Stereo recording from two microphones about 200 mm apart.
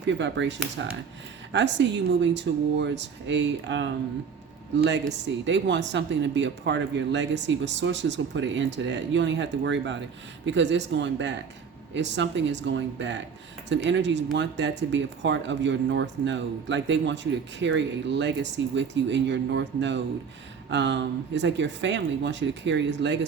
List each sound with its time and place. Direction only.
0.0 s speech: 65° right (ahead or behind)